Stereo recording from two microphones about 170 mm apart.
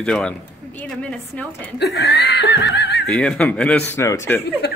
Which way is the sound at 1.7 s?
70° left (ahead or behind).